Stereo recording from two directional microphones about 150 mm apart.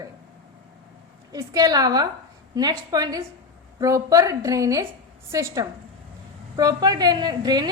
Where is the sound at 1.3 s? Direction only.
25° right (ahead or behind).